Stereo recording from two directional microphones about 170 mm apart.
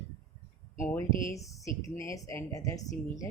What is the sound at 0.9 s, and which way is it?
A woman's voice, 15° left (ahead or behind).